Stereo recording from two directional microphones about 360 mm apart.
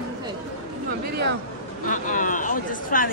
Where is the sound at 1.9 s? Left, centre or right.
Left.